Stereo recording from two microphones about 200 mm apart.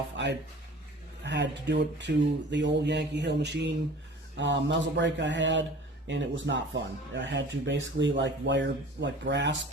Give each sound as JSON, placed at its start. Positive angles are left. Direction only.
{"t": 0.2, "sound": "speech", "side_deg": -65}